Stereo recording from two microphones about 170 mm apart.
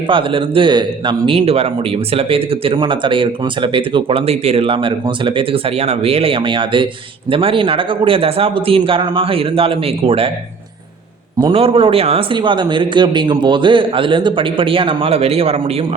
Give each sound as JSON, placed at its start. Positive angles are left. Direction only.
{"t": 0.1, "sound": "speech", "side_deg": -30}
{"t": 11.3, "sound": "speech", "side_deg": -30}